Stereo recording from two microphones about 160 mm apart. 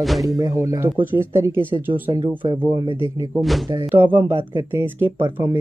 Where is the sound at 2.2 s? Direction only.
30° right (ahead or behind).